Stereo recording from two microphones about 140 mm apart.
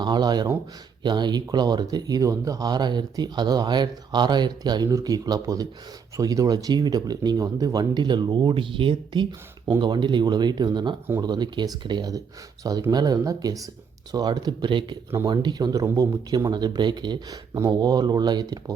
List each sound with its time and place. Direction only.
0.0 s speech: 30° right (ahead or behind)